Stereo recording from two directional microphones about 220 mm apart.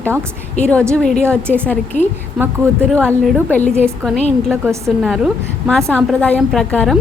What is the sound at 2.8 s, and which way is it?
Speech, 5° left (ahead or behind).